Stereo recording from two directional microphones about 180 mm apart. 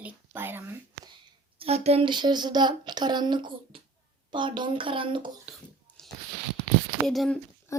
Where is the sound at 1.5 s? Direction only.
35° right (ahead or behind).